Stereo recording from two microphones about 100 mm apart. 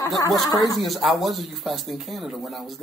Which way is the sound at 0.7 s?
Centre (ahead or behind).